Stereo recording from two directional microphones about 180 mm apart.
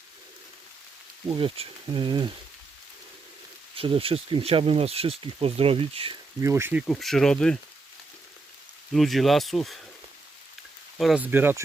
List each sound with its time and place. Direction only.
1.4 s speech: 30° right (ahead or behind)
3.8 s speech: 30° right (ahead or behind)
6.4 s speech: 15° right (ahead or behind)
6.8 s speech: centre (ahead or behind)
8.9 s speech: centre (ahead or behind)
10.9 s speech: centre (ahead or behind)